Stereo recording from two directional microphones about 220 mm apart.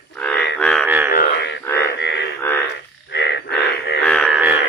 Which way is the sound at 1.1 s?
45° left (ahead or behind).